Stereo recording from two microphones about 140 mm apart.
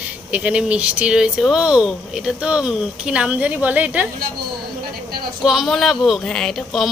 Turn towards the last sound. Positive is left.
turn(degrees=0)  # may be behind; listen again after turning